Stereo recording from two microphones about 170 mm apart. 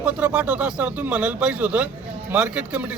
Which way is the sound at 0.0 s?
5° right (ahead or behind).